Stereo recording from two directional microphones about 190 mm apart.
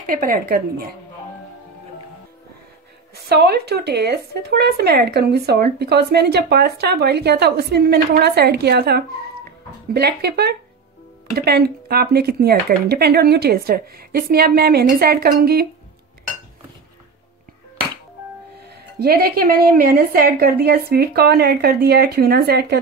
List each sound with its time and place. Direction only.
0.0 s a woman's voice: 50° right (ahead or behind)
3.3 s speech: 60° right (ahead or behind)
18.7 s a woman's voice: 60° right (ahead or behind)